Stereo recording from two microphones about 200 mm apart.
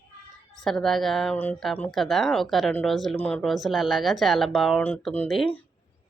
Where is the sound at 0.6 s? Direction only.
Centre (ahead or behind).